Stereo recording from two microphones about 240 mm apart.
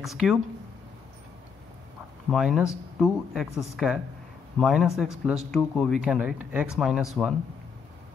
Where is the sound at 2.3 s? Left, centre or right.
Centre.